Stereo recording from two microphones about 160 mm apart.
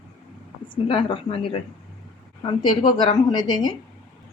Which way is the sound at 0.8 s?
35° left (ahead or behind).